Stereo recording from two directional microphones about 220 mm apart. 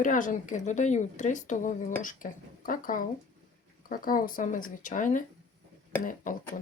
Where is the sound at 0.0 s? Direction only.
35° left (ahead or behind).